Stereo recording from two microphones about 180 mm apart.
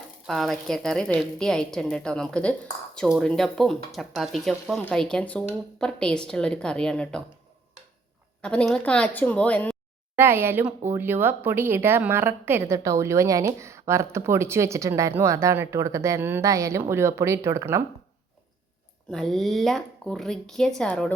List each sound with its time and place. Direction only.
0.3 s a woman's voice: centre (ahead or behind)
8.4 s a woman's voice: 5° left (ahead or behind)
10.2 s speech: 15° right (ahead or behind)
19.1 s a woman's voice: centre (ahead or behind)